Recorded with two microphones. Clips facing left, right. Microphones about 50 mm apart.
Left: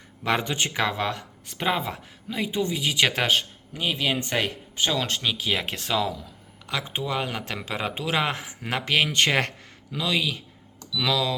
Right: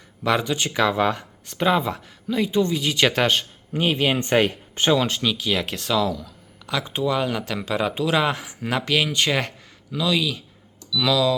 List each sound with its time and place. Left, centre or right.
0.3 s speech: left
0.7 s speech: centre
0.9 s speech: centre
1.5 s speech: centre
3.7 s speech: right
4.9 s speech: centre
5.2 s speech: centre; by 9.5 s left
9.9 s speech: left